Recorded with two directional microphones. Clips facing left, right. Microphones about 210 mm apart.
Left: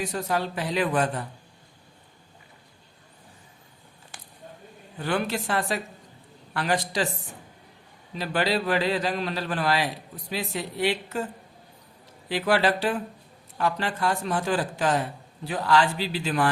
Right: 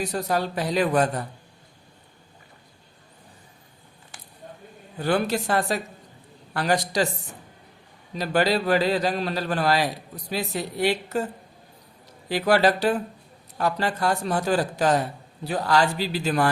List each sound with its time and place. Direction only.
0.0 s a man's voice: 40° right (ahead or behind)
4.9 s a man's voice: 40° right (ahead or behind)
8.1 s a man's voice: 40° right (ahead or behind)
12.3 s a man's voice: 40° right (ahead or behind)